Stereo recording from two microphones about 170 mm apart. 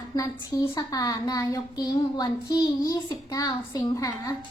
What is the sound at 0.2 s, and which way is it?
Speech, 20° left (ahead or behind).